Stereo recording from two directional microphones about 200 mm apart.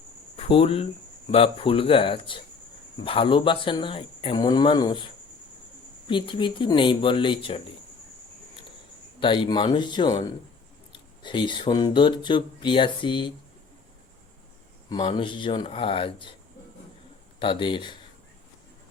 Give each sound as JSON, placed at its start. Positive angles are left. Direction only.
{"t": 0.3, "sound": "speech", "side_deg": 30}
{"t": 9.2, "sound": "speech", "side_deg": 25}
{"t": 14.8, "sound": "speech", "side_deg": 20}
{"t": 17.4, "sound": "speech", "side_deg": 25}